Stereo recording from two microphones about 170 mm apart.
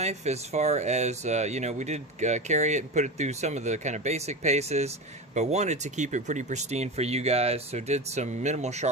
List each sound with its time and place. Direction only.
0.0 s speech: 40° right (ahead or behind)